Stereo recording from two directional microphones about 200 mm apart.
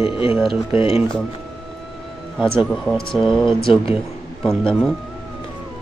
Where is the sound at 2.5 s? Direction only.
Centre (ahead or behind).